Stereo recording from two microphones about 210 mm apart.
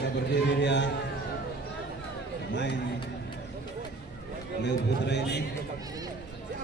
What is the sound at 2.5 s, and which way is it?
Speech, 55° left (ahead or behind).